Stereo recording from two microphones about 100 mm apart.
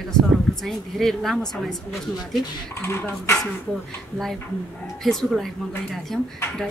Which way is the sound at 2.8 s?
25° left (ahead or behind).